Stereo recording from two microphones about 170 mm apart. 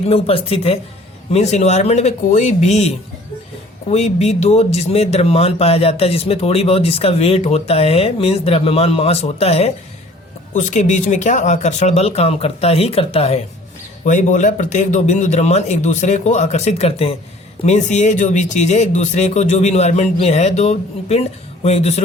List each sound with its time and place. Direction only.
0.0 s speech: 35° left (ahead or behind)
10.5 s speech: 45° left (ahead or behind)
14.0 s speech: 45° left (ahead or behind)